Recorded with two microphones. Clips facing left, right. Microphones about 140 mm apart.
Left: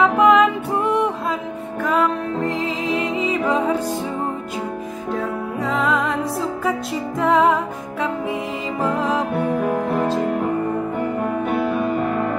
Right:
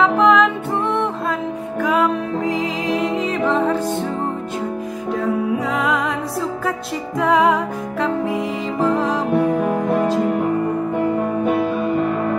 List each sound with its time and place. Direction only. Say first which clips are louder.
0.0 s music: even; 5° left (ahead or behind)
1.8 s music: right 2 dB; centre (ahead or behind)
5.1 s music: right 5 dB; centre (ahead or behind)
7.2 s music: right 1 dB; centre (ahead or behind)